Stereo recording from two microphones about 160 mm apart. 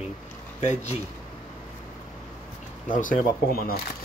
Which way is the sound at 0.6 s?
45° left (ahead or behind).